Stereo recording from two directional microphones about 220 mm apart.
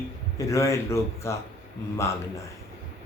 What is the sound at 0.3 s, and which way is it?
A man's voice, 15° left (ahead or behind).